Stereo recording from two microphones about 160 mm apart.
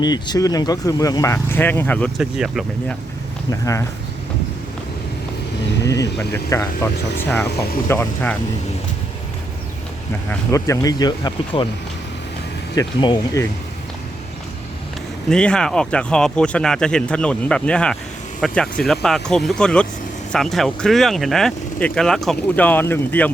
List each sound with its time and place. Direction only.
0.0 s speech: 25° left (ahead or behind)
2.1 s speech: centre (ahead or behind)
3.5 s speech: 20° left (ahead or behind)
5.8 s speech: 20° left (ahead or behind)
10.2 s speech: 20° left (ahead or behind)
12.7 s speech: 25° left (ahead or behind)
15.3 s speech: 5° left (ahead or behind)